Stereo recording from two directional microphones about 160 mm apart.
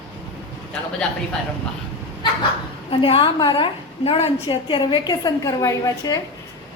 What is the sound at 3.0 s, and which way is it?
A woman's voice, 30° left (ahead or behind).